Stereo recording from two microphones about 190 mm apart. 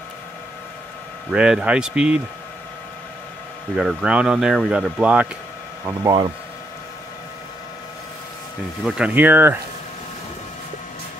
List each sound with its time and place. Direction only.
1.3 s speech: 5° right (ahead or behind)
3.7 s speech: 5° right (ahead or behind)
5.9 s speech: 20° right (ahead or behind)
8.8 s speech: 5° right (ahead or behind)